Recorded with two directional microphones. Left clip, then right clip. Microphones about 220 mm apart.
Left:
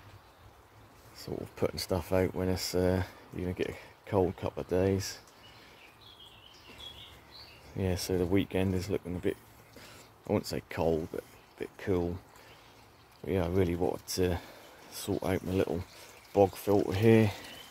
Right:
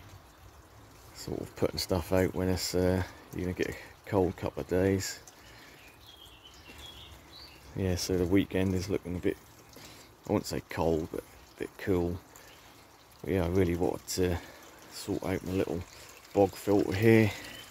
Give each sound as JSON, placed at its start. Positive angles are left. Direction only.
{"t": 1.1, "sound": "speech", "side_deg": 0}
{"t": 7.7, "sound": "speech", "side_deg": 0}
{"t": 13.2, "sound": "speech", "side_deg": 0}
{"t": 14.9, "sound": "speech", "side_deg": 20}
{"t": 16.3, "sound": "speech", "side_deg": 5}